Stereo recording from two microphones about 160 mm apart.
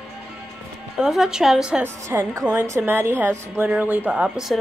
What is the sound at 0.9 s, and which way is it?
A woman's voice, 5° right (ahead or behind).